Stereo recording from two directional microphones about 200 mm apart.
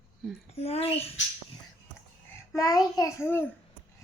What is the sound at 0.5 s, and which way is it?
Speech, 30° left (ahead or behind).